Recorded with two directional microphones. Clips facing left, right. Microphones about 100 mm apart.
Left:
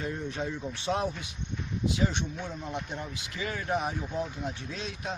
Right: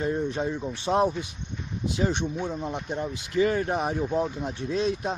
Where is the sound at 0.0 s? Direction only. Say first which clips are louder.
Right 7 dB; 30° right (ahead or behind).